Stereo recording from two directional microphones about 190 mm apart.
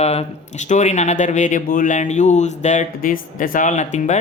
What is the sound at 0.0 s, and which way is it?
Speech, 35° left (ahead or behind).